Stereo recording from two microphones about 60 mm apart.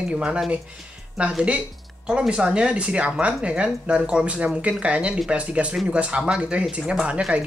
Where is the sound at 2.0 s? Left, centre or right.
Centre.